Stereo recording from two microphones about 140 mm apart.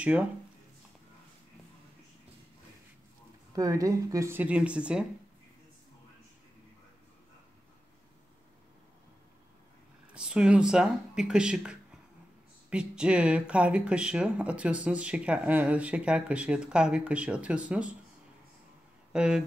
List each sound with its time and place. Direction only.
0.0 s speech: 10° right (ahead or behind)
3.5 s speech: 25° right (ahead or behind); by 5.0 s 10° right (ahead or behind)
10.1 s speech: 5° right (ahead or behind)
19.1 s speech: 5° right (ahead or behind)